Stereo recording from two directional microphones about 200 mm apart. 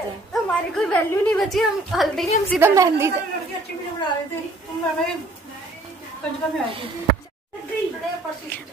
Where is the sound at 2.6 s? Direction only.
15° right (ahead or behind).